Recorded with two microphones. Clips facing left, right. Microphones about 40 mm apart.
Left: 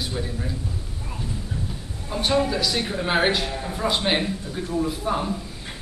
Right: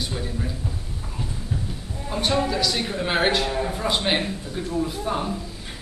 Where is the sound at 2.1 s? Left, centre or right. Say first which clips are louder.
Left 1 dB; centre.